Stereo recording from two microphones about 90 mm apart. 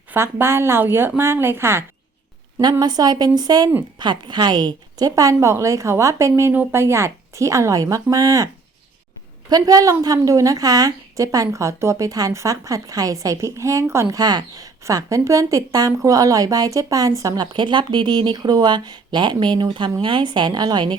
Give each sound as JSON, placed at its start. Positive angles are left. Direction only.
{"t": 0.1, "sound": "speech", "side_deg": -25}
{"t": 2.7, "sound": "a woman's voice", "side_deg": -50}
{"t": 9.5, "sound": "a woman's voice", "side_deg": -45}
{"t": 14.2, "sound": "a woman's voice", "side_deg": -45}